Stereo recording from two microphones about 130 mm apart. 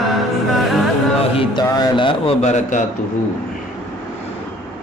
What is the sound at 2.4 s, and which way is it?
Speech, 65° left (ahead or behind).